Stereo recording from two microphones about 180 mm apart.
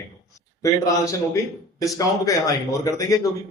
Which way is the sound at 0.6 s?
20° left (ahead or behind).